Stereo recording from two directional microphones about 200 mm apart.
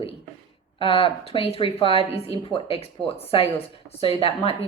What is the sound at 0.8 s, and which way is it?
A woman's voice, 25° left (ahead or behind).